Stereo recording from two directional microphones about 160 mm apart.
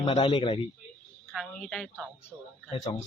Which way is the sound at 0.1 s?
35° left (ahead or behind).